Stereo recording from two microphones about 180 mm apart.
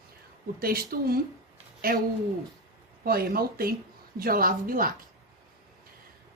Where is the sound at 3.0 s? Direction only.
55° right (ahead or behind).